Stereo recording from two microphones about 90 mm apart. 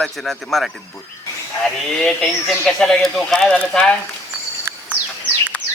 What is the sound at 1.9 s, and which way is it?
Speech, 5° left (ahead or behind).